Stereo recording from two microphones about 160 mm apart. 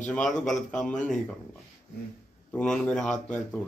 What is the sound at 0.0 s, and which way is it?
Speech, 5° left (ahead or behind).